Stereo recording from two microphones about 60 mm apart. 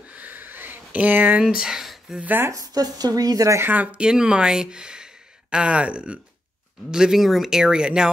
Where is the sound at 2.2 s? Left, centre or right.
Right.